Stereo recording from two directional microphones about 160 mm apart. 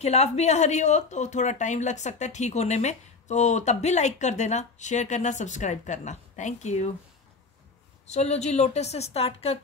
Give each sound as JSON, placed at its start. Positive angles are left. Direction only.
{"t": 0.0, "sound": "speech", "side_deg": 45}
{"t": 8.1, "sound": "a woman's voice", "side_deg": 45}